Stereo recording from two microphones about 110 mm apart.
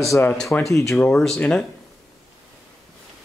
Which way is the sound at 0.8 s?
5° left (ahead or behind).